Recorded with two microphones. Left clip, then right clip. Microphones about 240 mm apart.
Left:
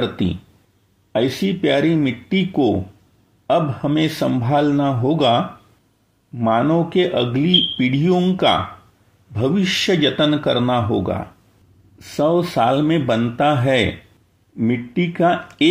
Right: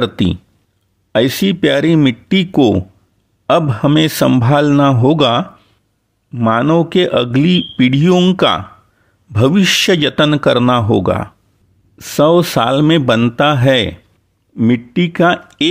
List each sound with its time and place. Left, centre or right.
0.0 s speech: right